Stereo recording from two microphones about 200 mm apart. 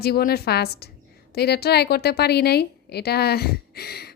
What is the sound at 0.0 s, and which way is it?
A woman's voice, 50° left (ahead or behind).